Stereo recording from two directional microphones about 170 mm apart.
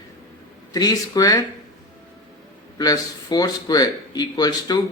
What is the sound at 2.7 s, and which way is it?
A man's voice, 25° left (ahead or behind).